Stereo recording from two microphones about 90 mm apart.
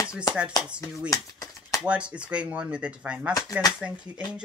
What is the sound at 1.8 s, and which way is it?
Speech, 15° right (ahead or behind).